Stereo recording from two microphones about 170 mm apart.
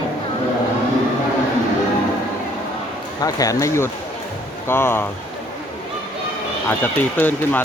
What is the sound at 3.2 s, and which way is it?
Speech, 20° left (ahead or behind).